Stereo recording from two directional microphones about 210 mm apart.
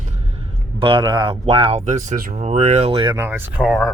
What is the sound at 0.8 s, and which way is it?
Speech, 25° right (ahead or behind).